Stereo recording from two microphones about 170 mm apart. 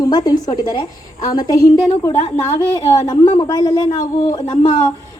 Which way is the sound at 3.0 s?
20° left (ahead or behind).